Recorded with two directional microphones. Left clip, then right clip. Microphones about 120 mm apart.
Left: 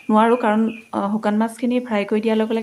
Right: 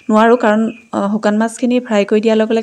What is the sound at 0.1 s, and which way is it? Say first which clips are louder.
Speech: right 6 dB; 45° right (ahead or behind).